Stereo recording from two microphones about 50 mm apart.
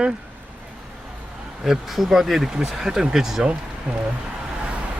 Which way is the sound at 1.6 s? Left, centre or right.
Centre.